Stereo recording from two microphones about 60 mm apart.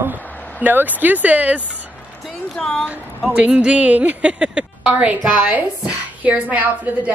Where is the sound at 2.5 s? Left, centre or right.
Centre.